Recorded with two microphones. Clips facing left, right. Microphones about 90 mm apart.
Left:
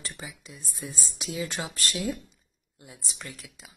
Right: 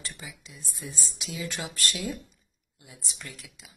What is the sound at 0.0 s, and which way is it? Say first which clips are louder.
Speech: left 2 dB; 35° left (ahead or behind).